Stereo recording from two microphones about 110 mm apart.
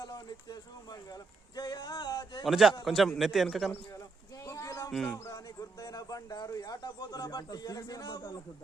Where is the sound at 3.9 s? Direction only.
30° left (ahead or behind).